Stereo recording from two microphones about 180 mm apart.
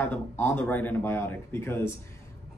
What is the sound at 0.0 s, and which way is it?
Speech, 10° left (ahead or behind).